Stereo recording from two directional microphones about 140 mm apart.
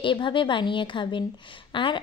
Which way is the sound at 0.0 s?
35° left (ahead or behind).